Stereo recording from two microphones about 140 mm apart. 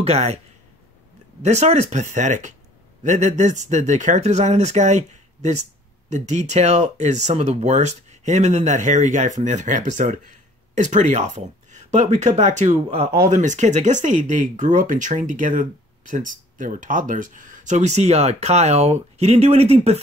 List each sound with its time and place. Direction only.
0.0 s speech: 50° right (ahead or behind)
1.4 s speech: 55° right (ahead or behind)